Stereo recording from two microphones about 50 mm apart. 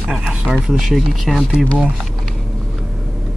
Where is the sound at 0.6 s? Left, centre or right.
Centre.